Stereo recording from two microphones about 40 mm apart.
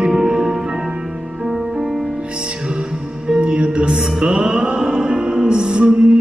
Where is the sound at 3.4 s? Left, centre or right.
Right.